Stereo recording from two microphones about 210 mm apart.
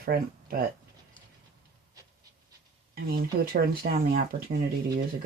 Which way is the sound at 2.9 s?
45° right (ahead or behind).